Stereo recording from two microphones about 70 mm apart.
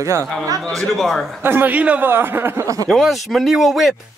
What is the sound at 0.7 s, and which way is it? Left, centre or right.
Speech, centre.